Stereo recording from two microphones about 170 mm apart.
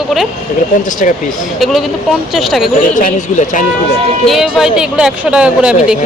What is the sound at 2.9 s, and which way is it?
Speech, 50° left (ahead or behind).